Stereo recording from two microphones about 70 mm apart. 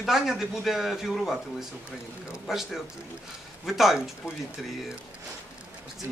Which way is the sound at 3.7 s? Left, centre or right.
Centre.